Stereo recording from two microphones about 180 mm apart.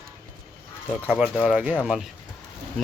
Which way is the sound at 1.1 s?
5° right (ahead or behind).